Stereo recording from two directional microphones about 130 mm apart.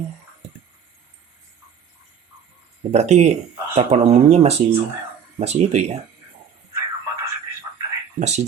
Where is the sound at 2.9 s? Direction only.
60° right (ahead or behind).